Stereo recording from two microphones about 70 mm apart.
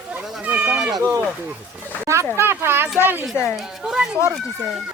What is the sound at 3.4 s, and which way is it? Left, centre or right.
Speech, left.